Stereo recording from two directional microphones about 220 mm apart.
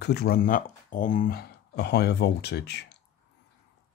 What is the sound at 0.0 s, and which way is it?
Speech, 45° left (ahead or behind).